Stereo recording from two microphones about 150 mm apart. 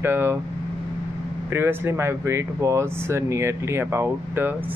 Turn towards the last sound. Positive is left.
turn(degrees=-15)  # may be behind; listen again after turning